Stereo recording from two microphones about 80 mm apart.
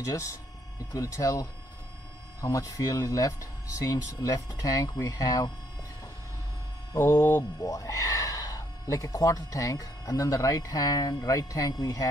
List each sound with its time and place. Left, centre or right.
0.0 s speech: left
2.5 s speech: left
7.0 s speech: left